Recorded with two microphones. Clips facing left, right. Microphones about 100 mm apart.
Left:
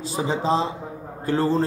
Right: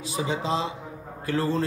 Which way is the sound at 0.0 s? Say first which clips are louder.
Left 4 dB; 35° left (ahead or behind).